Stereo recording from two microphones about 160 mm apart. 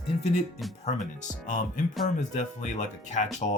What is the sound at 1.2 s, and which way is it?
Speech, 50° left (ahead or behind).